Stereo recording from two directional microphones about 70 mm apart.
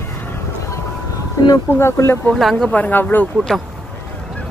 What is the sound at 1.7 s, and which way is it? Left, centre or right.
Speech, left.